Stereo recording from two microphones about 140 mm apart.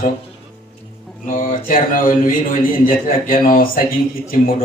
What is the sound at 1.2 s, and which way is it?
Mantra, 75° left (ahead or behind).